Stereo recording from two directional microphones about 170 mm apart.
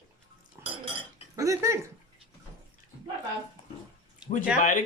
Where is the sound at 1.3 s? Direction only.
20° right (ahead or behind).